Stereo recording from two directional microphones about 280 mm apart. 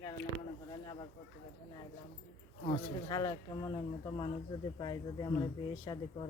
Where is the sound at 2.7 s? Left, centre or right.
Centre.